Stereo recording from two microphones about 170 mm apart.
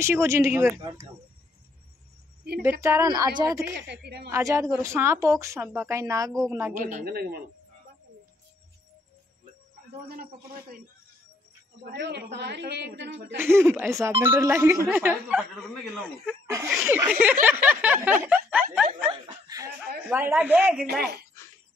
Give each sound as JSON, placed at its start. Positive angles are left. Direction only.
{"t": 0.0, "sound": "speech", "side_deg": -15}
{"t": 2.8, "sound": "a woman's voice", "side_deg": -20}
{"t": 3.8, "sound": "a woman's voice", "side_deg": -80}
{"t": 4.3, "sound": "speech", "side_deg": -20}
{"t": 6.7, "sound": "speech", "side_deg": -45}
{"t": 7.1, "sound": "speech", "side_deg": -65}
{"t": 11.8, "sound": "a woman's voice", "side_deg": -85}
{"t": 13.4, "sound": "speech", "side_deg": -15}
{"t": 16.4, "sound": "speech", "side_deg": -15}
{"t": 19.0, "sound": "a woman's voice", "side_deg": -20}
{"t": 20.1, "sound": "speech", "side_deg": -10}
{"t": 20.8, "sound": "a woman's voice", "side_deg": -70}